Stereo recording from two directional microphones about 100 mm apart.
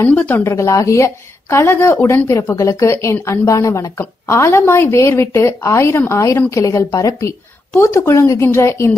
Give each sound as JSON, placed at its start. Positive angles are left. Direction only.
{"t": 0.0, "sound": "a woman's voice", "side_deg": 20}
{"t": 0.5, "sound": "a woman's voice", "side_deg": 35}